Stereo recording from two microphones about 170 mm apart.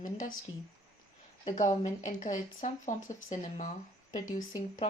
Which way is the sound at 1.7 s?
45° left (ahead or behind).